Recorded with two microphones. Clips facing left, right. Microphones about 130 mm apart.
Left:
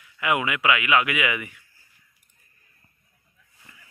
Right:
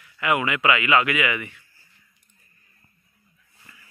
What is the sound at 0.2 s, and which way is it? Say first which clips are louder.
Speech: right 1 dB; 15° left (ahead or behind).